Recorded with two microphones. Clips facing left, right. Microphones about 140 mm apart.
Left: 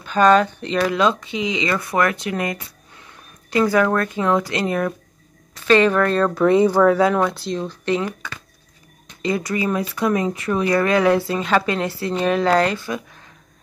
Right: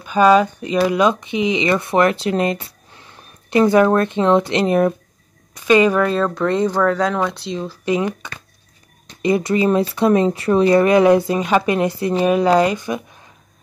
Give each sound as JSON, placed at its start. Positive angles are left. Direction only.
{"t": 0.0, "sound": "speech", "side_deg": -10}
{"t": 8.2, "sound": "speech", "side_deg": -20}